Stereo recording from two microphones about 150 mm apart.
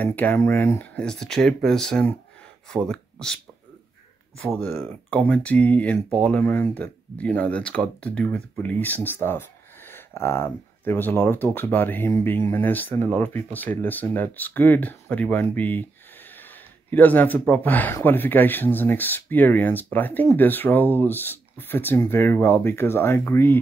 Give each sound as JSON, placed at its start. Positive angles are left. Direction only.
{"t": 0.0, "sound": "speech", "side_deg": 10}
{"t": 4.6, "sound": "speech", "side_deg": 10}